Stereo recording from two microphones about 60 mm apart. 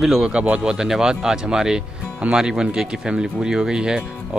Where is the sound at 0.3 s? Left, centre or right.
Centre.